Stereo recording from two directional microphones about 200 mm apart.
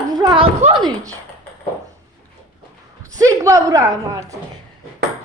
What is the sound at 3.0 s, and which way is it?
A woman's voice, 15° right (ahead or behind).